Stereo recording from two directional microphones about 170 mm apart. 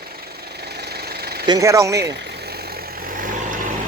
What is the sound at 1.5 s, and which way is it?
Speech, 20° right (ahead or behind).